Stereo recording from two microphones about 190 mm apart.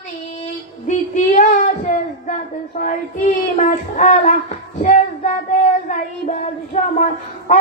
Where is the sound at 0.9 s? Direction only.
40° left (ahead or behind).